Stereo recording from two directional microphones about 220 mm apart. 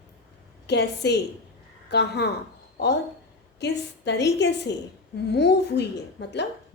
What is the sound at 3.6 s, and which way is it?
A woman's voice, 50° left (ahead or behind).